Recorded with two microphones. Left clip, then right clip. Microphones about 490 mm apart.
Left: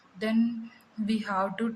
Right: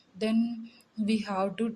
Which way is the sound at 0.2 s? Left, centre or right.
Right.